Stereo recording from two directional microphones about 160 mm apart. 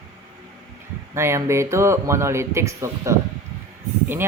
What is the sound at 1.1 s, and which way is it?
Speech, 15° right (ahead or behind).